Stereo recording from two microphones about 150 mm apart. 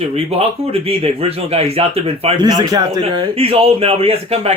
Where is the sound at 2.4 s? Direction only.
25° right (ahead or behind).